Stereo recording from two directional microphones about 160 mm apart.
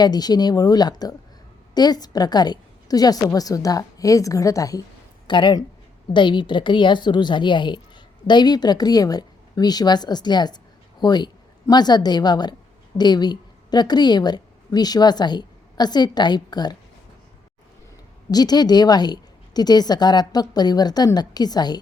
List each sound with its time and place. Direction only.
0.0 s a woman's voice: 25° left (ahead or behind)
18.3 s a woman's voice: 25° left (ahead or behind)